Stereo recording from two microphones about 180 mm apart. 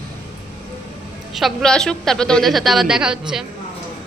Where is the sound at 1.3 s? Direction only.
Centre (ahead or behind).